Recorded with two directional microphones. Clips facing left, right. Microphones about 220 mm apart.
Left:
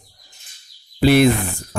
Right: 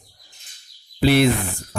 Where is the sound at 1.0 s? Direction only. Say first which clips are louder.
Left 3 dB; 45° left (ahead or behind).